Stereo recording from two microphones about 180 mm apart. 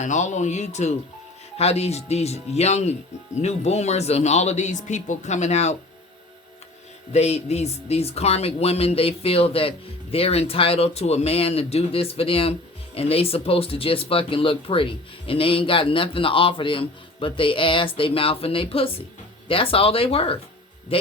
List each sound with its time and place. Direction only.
0.0 s speech: 40° left (ahead or behind)
7.1 s speech: 35° left (ahead or behind)